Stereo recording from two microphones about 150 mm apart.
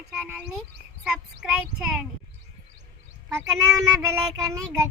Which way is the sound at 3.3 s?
20° right (ahead or behind).